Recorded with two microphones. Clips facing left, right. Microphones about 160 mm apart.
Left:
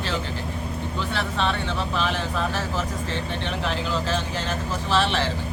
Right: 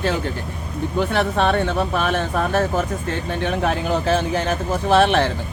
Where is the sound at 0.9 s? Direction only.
55° right (ahead or behind).